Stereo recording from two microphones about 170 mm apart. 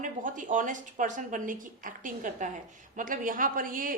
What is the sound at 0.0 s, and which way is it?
Speech, 50° right (ahead or behind).